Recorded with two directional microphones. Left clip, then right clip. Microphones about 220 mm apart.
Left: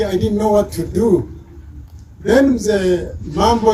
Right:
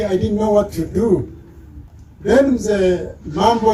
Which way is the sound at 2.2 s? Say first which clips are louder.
Left 1 dB; 50° left (ahead or behind).